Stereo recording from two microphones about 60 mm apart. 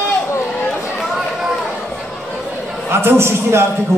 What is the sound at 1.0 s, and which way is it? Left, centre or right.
Run, centre.